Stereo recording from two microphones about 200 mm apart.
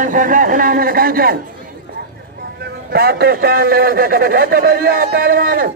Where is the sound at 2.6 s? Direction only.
50° right (ahead or behind).